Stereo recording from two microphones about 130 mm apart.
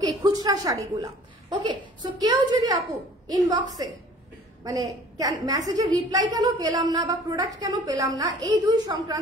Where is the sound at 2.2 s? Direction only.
30° right (ahead or behind).